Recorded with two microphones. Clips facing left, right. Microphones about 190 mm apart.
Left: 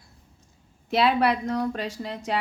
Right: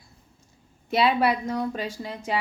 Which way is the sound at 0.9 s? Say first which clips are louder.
Even; centre (ahead or behind).